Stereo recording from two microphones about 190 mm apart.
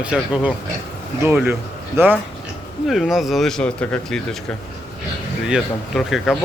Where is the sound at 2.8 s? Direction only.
Centre (ahead or behind).